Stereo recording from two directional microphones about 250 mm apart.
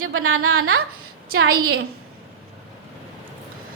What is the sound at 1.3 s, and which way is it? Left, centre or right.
Speech, right.